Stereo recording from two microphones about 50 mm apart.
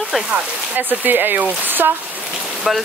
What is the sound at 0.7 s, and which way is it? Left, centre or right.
Speech, right.